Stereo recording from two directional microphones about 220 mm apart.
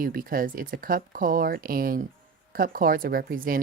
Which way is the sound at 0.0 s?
40° right (ahead or behind).